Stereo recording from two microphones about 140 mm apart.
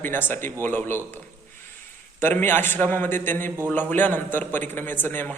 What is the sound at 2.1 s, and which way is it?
A man's voice, 15° left (ahead or behind).